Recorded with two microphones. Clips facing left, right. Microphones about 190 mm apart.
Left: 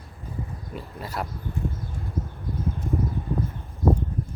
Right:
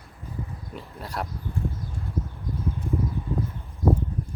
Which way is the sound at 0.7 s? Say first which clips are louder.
Left 2 dB; centre (ahead or behind).